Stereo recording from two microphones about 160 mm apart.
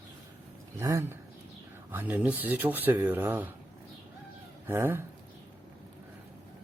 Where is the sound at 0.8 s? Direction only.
20° right (ahead or behind).